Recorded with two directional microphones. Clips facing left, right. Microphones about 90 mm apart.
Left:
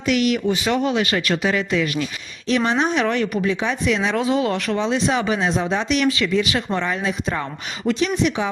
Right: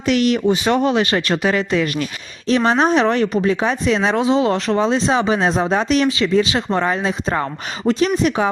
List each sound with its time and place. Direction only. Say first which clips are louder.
0.0 s speech: right 3 dB; 35° right (ahead or behind)
4.2 s speech: right 4 dB; 25° right (ahead or behind); by 6.1 s 40° right (ahead or behind)
6.1 s speech: right 3 dB; 25° right (ahead or behind)
6.7 s speech: right 4 dB; 40° right (ahead or behind)